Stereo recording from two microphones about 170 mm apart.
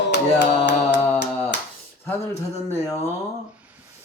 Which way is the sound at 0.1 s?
90° left.